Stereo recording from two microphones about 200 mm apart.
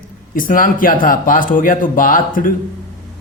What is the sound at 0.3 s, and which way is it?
A man's voice, 45° left (ahead or behind).